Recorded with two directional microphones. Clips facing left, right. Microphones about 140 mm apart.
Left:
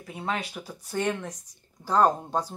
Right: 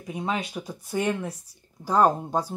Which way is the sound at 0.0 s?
15° right (ahead or behind).